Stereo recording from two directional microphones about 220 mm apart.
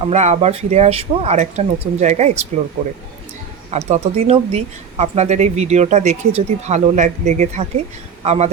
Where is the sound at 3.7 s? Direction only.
30° right (ahead or behind).